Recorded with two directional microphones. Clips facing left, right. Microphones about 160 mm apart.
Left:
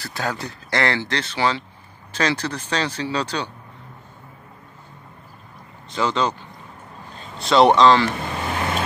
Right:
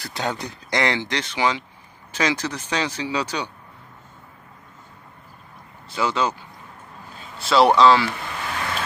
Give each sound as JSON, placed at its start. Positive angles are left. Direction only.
{"t": 0.0, "sound": "speech", "side_deg": -20}
{"t": 5.9, "sound": "speech", "side_deg": -10}
{"t": 8.2, "sound": "vehicle", "side_deg": 30}